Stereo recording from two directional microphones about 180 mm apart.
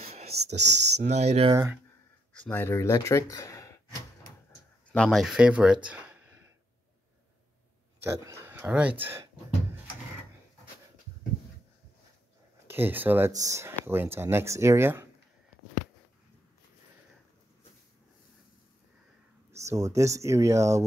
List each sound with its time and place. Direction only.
0.6 s speech: 70° right (ahead or behind)
1.0 s speech: 35° right (ahead or behind)
1.5 s speech: 15° right (ahead or behind)
2.4 s speech: 10° left (ahead or behind)
4.8 s speech: 5° left (ahead or behind)
8.0 s speech: 15° right (ahead or behind)
12.6 s speech: 10° right (ahead or behind)
19.5 s speech: 15° right (ahead or behind)